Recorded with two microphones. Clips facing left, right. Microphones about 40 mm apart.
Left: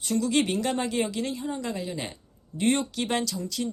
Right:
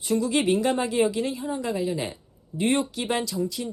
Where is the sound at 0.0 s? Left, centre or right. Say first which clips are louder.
Right 2 dB; right.